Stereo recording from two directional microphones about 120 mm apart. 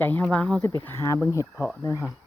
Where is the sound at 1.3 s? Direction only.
25° left (ahead or behind).